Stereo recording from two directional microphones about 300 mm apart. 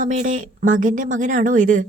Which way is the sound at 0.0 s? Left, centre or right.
Right.